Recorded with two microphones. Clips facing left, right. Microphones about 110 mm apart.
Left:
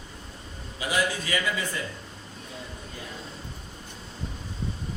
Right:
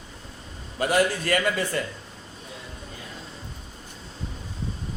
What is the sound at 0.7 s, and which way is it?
A man's voice, 55° right (ahead or behind).